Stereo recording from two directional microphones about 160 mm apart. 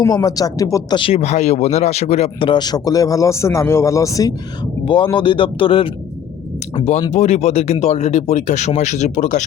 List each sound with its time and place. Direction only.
0.0 s a man's voice: 20° left (ahead or behind)
7.1 s speech: 45° left (ahead or behind)